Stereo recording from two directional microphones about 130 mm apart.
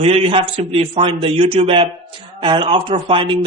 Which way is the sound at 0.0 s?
45° right (ahead or behind).